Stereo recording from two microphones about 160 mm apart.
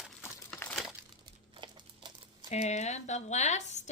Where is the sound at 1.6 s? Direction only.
30° right (ahead or behind).